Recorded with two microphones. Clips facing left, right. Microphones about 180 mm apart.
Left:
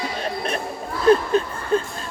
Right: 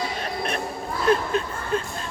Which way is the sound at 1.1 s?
35° left (ahead or behind).